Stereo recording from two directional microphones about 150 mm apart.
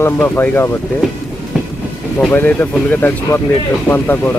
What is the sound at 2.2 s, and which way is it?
Speech, 10° left (ahead or behind).